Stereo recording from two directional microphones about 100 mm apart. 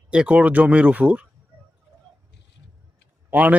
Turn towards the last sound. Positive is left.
turn(degrees=-15)  # may be behind; listen again after turning